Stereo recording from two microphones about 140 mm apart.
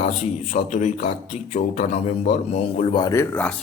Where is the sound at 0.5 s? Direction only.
55° left (ahead or behind).